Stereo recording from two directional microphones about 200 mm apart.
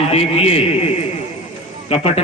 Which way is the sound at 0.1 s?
30° left (ahead or behind).